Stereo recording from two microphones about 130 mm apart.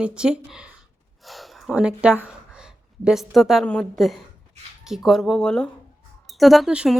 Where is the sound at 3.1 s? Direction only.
Centre (ahead or behind).